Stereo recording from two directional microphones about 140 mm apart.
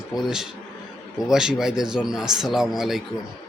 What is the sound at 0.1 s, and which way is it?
Speech, 5° right (ahead or behind).